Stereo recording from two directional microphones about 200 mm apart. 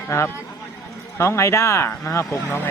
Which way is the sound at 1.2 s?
15° left (ahead or behind).